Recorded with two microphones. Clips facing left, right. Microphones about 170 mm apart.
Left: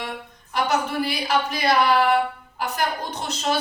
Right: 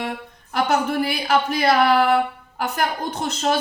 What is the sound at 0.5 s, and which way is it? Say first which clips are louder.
Speech: right 3 dB; 55° right (ahead or behind).